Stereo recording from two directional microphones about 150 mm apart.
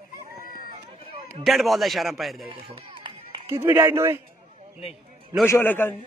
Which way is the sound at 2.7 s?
35° right (ahead or behind).